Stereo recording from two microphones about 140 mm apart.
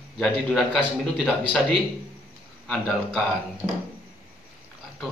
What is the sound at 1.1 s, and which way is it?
Speech, 10° left (ahead or behind).